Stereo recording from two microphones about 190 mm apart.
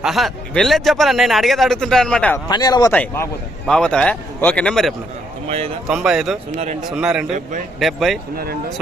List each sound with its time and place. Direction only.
0.0 s a man's voice: centre (ahead or behind)
2.5 s speech: 20° left (ahead or behind)
2.9 s a man's voice: 10° left (ahead or behind)
5.5 s speech: 30° right (ahead or behind)
5.9 s a man's voice: 5° right (ahead or behind)